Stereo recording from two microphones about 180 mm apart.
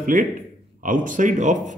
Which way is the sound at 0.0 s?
45° right (ahead or behind).